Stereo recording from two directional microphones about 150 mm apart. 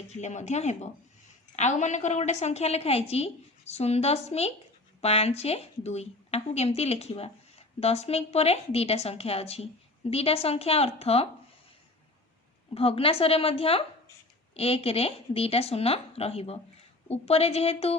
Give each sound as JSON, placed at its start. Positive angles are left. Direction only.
{"t": 0.1, "sound": "a woman's voice", "side_deg": 50}
{"t": 12.7, "sound": "a woman's voice", "side_deg": 40}